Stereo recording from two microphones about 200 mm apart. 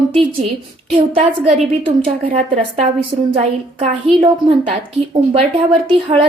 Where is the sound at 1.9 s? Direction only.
25° right (ahead or behind).